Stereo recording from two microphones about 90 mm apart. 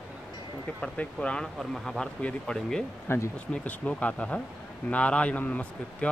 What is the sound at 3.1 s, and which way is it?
Speech, 30° left (ahead or behind).